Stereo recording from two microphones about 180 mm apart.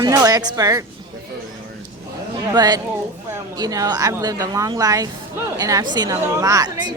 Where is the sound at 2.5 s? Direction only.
20° right (ahead or behind).